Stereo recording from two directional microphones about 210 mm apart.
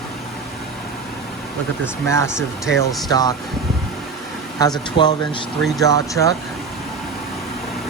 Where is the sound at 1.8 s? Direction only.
15° left (ahead or behind).